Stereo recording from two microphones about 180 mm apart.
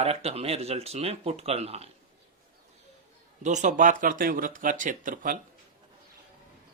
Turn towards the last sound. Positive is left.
turn(degrees=-50)  # may be behind; listen again after turning